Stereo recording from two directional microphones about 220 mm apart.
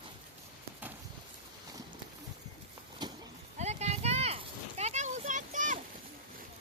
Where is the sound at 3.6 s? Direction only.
30° right (ahead or behind).